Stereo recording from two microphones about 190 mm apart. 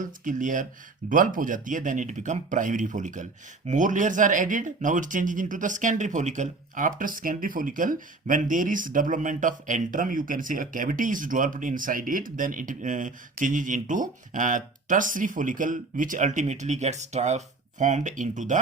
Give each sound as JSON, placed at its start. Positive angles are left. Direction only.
{"t": 0.0, "sound": "speech", "side_deg": -45}